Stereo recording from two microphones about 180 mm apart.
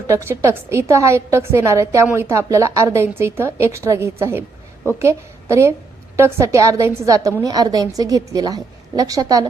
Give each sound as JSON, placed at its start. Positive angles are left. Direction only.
{"t": 0.1, "sound": "a woman's voice", "side_deg": -15}